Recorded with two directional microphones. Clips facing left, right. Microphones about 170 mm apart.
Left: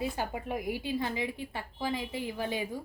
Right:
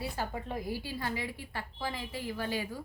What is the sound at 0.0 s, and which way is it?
A woman's voice, 15° left (ahead or behind).